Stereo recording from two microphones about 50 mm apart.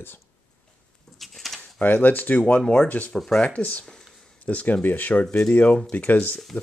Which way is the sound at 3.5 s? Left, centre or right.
Left.